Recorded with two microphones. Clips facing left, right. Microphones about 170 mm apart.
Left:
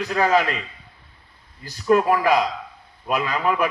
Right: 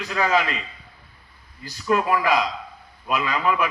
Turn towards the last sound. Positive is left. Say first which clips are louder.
# left 1 dB
turn(degrees=45)  # may be behind; listen again after turning